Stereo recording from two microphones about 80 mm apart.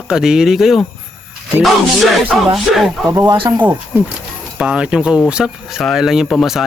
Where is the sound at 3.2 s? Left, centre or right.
Right.